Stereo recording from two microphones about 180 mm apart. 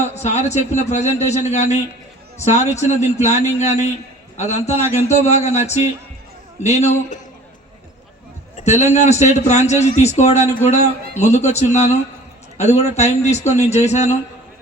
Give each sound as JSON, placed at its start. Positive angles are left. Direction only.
{"t": 0.0, "sound": "a man's voice", "side_deg": 40}
{"t": 8.5, "sound": "a man's voice", "side_deg": 40}